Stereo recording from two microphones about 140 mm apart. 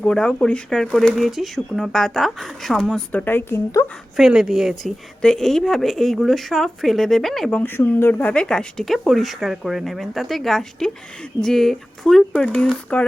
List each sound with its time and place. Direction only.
0.0 s speech: 5° left (ahead or behind)
4.2 s speech: 5° right (ahead or behind)
7.6 s speech: 15° left (ahead or behind)